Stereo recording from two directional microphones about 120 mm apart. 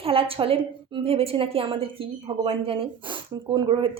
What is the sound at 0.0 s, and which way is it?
A woman's voice, 50° right (ahead or behind).